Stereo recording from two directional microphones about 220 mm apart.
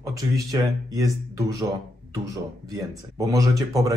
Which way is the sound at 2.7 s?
15° right (ahead or behind).